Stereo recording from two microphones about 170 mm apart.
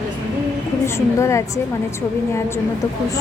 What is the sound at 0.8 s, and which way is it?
Speech, 15° left (ahead or behind).